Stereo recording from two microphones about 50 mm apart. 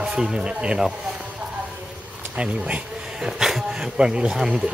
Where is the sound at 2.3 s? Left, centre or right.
Right.